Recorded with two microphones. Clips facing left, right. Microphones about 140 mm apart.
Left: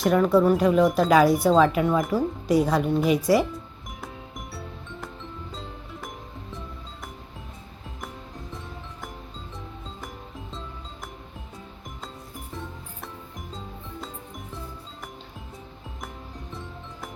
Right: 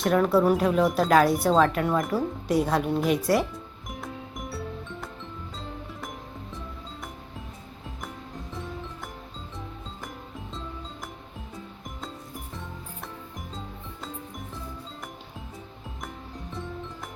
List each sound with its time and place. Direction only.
0.0 s speech: centre (ahead or behind)
16.5 s music: centre (ahead or behind)